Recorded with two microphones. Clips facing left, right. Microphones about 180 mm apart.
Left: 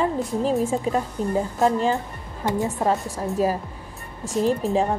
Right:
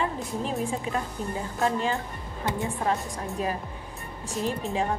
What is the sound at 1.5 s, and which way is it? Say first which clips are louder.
Speech: left 5 dB; 35° left (ahead or behind).